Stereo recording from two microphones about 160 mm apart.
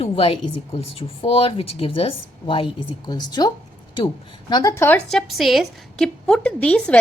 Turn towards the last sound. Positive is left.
turn(degrees=5)  # may be behind; listen again after turning